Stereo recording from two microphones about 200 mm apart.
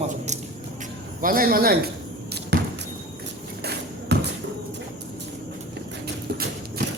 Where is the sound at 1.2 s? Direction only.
45° right (ahead or behind).